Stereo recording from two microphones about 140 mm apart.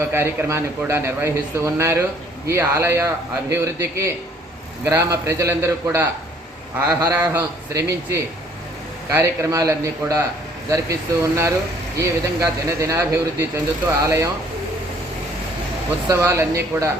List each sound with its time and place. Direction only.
0.1 s speech: 20° right (ahead or behind)
16.0 s speech: 20° right (ahead or behind)